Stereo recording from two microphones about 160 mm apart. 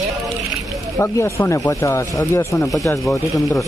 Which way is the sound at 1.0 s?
15° left (ahead or behind).